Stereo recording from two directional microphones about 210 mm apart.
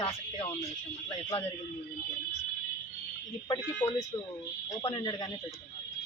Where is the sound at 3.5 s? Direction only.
20° left (ahead or behind).